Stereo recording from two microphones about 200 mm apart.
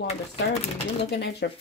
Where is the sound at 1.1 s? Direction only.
55° left (ahead or behind).